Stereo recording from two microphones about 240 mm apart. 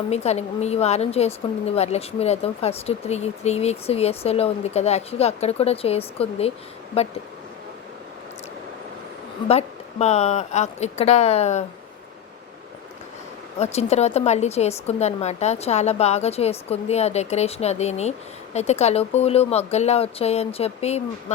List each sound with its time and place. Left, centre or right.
0.1 s a woman's voice: left
9.5 s a woman's voice: left
13.6 s a woman's voice: left